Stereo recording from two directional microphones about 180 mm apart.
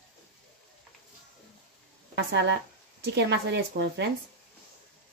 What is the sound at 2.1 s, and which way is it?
A woman's voice, 70° right (ahead or behind).